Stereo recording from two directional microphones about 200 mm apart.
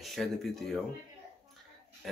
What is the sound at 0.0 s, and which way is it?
Speech, centre (ahead or behind).